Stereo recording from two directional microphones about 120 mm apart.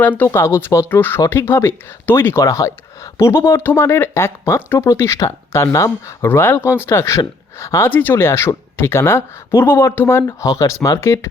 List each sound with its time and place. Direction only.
0.0 s speech: 15° left (ahead or behind)